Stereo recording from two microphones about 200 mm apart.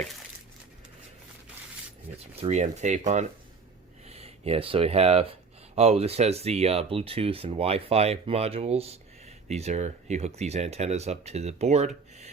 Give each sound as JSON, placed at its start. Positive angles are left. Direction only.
{"t": 2.1, "sound": "speech", "side_deg": -35}